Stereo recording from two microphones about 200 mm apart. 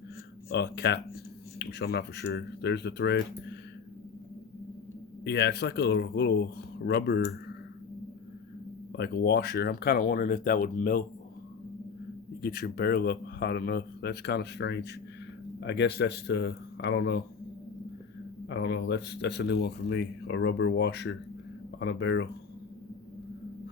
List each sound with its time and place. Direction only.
0.5 s speech: 55° left (ahead or behind)
5.2 s speech: 55° left (ahead or behind)
8.9 s speech: 55° left (ahead or behind)
12.4 s speech: 50° left (ahead or behind)
18.4 s speech: 60° left (ahead or behind)